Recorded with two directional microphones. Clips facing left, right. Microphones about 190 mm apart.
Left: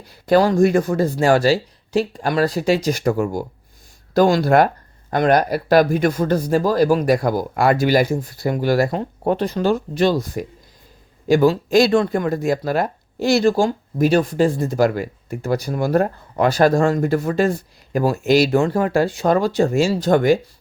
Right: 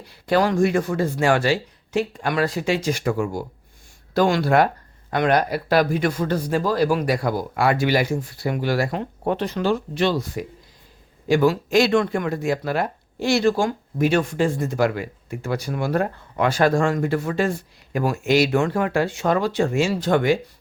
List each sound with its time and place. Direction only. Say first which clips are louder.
0.0 s speech: left 4 dB; 40° left (ahead or behind)